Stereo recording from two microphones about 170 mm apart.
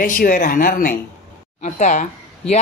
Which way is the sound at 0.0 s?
55° left (ahead or behind).